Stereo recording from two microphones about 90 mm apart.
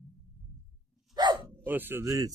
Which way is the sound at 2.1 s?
40° right (ahead or behind).